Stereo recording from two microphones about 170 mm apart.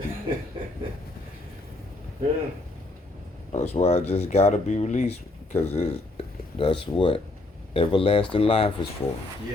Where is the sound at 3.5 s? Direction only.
40° left (ahead or behind).